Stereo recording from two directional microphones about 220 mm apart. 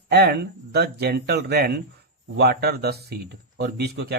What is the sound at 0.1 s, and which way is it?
A man's voice, 50° right (ahead or behind).